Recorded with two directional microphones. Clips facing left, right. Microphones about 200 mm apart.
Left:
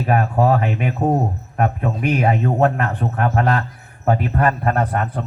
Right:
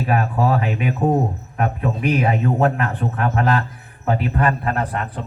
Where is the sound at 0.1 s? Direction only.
40° left (ahead or behind).